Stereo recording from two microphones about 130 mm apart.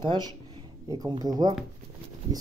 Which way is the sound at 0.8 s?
30° right (ahead or behind).